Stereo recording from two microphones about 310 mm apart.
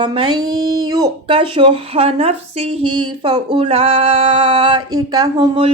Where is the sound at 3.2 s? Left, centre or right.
Centre.